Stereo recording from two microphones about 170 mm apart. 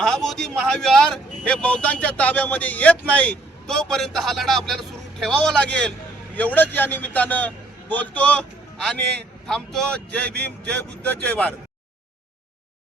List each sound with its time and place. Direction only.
0.0 s a man's voice: 5° left (ahead or behind)
10.2 s speech: 80° right
11.0 s speech: 10° left (ahead or behind)